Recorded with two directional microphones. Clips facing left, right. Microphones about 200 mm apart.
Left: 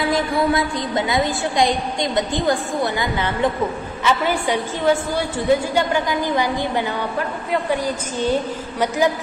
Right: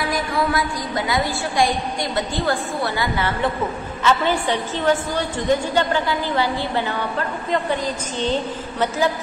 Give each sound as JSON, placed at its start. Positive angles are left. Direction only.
{"t": 0.1, "sound": "a woman's voice", "side_deg": 25}